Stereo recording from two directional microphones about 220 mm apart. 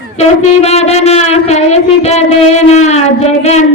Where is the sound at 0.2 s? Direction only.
30° left (ahead or behind).